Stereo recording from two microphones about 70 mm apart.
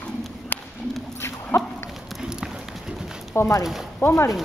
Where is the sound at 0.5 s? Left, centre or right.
Left.